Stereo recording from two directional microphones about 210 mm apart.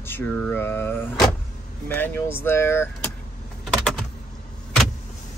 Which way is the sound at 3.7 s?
Centre (ahead or behind).